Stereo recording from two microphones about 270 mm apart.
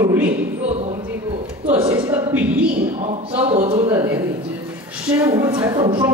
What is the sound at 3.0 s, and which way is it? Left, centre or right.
Speech, right.